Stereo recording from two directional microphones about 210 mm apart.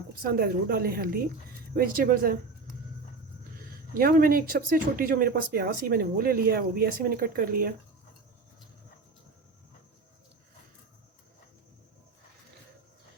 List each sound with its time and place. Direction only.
0.1 s speech: 45° right (ahead or behind)
3.9 s speech: 45° right (ahead or behind)